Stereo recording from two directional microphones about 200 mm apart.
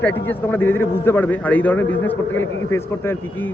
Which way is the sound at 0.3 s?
10° left (ahead or behind).